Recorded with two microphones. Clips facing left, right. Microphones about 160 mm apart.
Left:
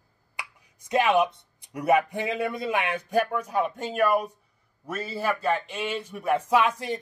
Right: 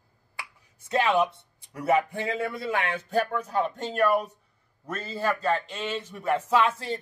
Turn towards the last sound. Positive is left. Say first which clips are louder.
# left 1 dB
turn(degrees=15)  # may be behind; listen again after turning